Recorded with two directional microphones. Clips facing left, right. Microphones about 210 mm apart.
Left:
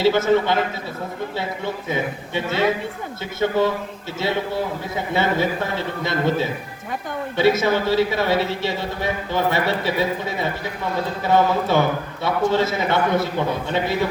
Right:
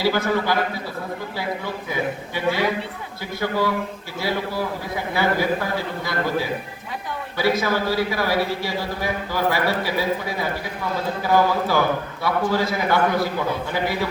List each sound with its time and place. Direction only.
0.0 s a man's voice: 25° left (ahead or behind)